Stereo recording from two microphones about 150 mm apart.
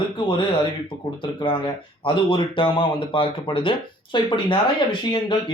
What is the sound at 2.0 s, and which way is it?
Speech, 35° left (ahead or behind).